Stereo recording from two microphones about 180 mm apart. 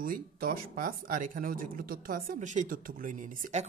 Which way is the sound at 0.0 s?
50° right (ahead or behind).